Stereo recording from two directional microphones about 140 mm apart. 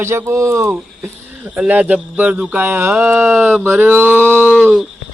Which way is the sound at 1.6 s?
10° right (ahead or behind).